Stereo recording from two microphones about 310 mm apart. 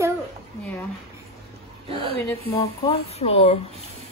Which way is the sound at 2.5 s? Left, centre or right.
Centre.